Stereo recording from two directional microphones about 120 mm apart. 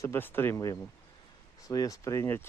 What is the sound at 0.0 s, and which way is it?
Speech, 20° left (ahead or behind).